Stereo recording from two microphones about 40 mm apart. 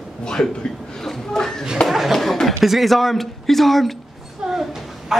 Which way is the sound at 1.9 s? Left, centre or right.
Centre.